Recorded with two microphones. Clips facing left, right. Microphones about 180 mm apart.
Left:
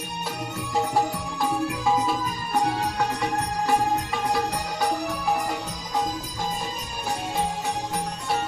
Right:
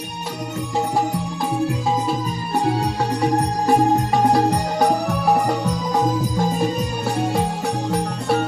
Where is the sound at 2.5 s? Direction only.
30° right (ahead or behind); by 6.6 s 60° right (ahead or behind).